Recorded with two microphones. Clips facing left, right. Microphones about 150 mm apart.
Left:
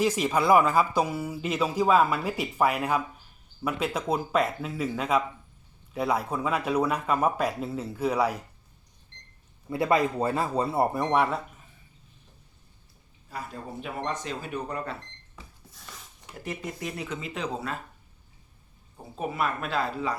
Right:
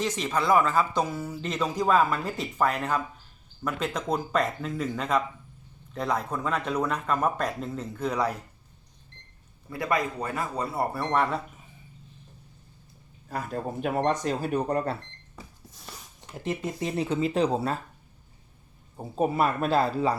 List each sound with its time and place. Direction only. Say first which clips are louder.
0.0 s speech: left 3 dB; 10° left (ahead or behind)
9.6 s a man's voice: left 4 dB; 25° left (ahead or behind)
13.2 s speech: right 6 dB; 50° right (ahead or behind)
16.6 s speech: right 7 dB; 30° right (ahead or behind)
19.1 s speech: right 5 dB; 35° right (ahead or behind)